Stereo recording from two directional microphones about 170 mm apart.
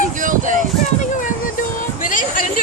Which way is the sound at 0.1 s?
50° right (ahead or behind).